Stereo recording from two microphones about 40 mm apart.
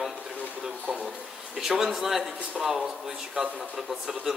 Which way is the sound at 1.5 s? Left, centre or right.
Centre.